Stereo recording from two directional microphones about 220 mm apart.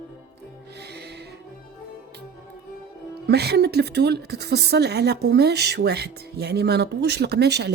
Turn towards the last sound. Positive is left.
turn(degrees=-50)  # may be behind; listen again after turning